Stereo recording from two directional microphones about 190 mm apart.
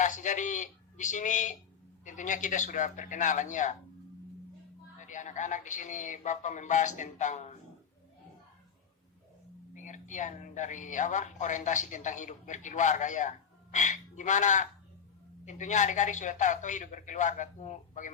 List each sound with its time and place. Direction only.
0.0 s a man's voice: 40° left (ahead or behind)
4.9 s a woman's voice: 40° left (ahead or behind)
9.7 s a woman's voice: 40° left (ahead or behind)